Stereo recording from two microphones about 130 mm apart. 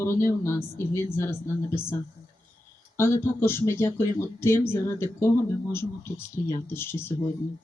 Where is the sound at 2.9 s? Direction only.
20° left (ahead or behind).